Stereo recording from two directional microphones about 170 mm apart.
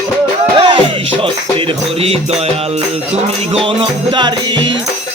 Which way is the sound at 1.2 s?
30° right (ahead or behind).